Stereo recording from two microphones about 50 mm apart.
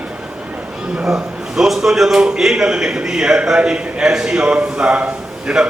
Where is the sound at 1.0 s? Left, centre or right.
Centre.